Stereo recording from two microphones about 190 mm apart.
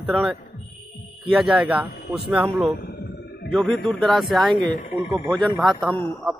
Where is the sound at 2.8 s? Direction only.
55° left (ahead or behind).